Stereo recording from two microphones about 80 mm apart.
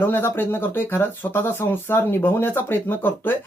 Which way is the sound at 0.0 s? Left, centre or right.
Left.